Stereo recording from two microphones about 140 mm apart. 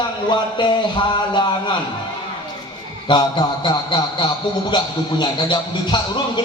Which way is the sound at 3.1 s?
30° left (ahead or behind).